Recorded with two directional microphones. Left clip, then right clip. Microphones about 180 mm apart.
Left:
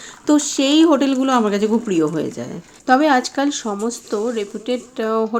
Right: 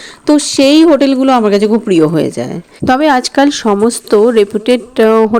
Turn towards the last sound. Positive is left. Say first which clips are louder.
# right 12 dB
turn(degrees=-45)  # may be behind; listen again after turning